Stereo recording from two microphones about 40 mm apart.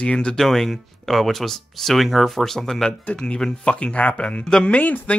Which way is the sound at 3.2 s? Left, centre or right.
Left.